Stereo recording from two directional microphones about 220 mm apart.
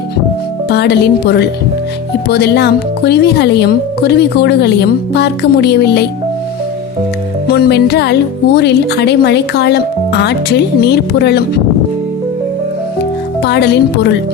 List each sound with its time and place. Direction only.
0.7 s speech: 50° left (ahead or behind)
7.4 s speech: 45° left (ahead or behind)
13.4 s speech: 50° left (ahead or behind)